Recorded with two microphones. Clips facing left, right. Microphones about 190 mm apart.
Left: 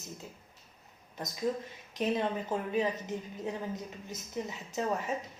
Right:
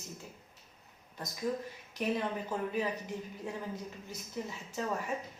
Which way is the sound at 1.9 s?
20° left (ahead or behind).